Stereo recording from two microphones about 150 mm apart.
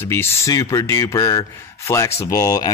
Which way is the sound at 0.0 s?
15° left (ahead or behind).